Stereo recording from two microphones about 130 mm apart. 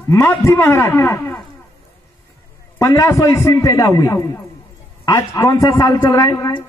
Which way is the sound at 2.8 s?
25° left (ahead or behind).